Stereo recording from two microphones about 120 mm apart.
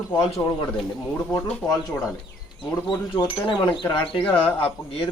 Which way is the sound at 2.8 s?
35° left (ahead or behind).